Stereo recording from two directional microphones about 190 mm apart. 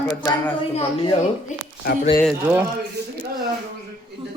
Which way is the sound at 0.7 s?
25° left (ahead or behind).